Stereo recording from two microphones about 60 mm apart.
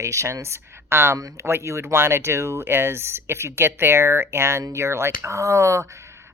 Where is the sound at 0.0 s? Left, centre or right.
Right.